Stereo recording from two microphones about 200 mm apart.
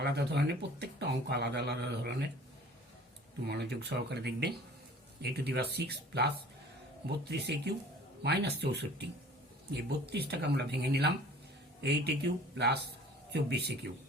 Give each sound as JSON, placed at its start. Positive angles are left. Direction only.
{"t": 0.0, "sound": "speech", "side_deg": -55}
{"t": 3.4, "sound": "speech", "side_deg": -55}
{"t": 10.1, "sound": "speech", "side_deg": -55}